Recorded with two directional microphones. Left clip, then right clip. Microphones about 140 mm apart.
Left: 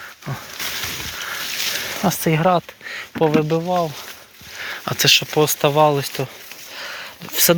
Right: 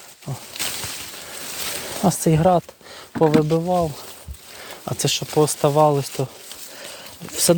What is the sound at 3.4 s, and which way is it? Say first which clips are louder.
Speech: even; 15° right (ahead or behind).